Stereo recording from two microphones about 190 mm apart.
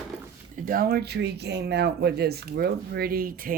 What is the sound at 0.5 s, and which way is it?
Speech, 50° right (ahead or behind).